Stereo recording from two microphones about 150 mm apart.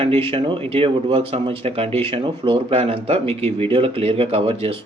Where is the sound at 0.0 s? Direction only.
40° right (ahead or behind).